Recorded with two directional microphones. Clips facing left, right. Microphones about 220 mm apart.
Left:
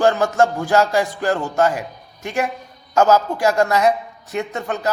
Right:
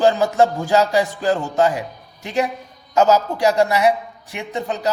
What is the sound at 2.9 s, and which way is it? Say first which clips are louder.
A man's voice: even; 15° right (ahead or behind).